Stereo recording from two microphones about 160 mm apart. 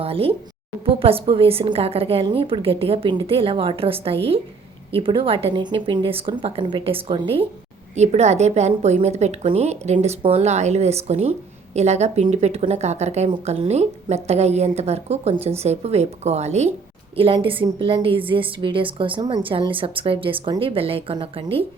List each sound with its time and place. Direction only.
0.0 s a woman's voice: 35° right (ahead or behind)